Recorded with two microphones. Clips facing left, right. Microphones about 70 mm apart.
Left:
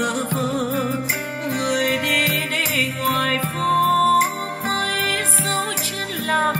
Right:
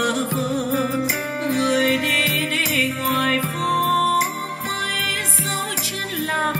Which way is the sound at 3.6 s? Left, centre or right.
Left.